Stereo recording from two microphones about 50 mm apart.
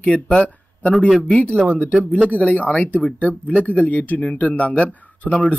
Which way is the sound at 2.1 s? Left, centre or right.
Left.